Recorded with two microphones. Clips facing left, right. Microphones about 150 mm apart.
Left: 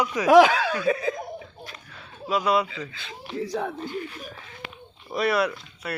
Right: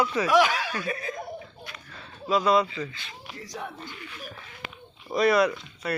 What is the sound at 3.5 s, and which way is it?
Speech, 90° left.